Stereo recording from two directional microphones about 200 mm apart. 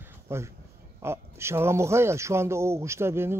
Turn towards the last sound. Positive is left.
turn(degrees=-10)  # may be behind; listen again after turning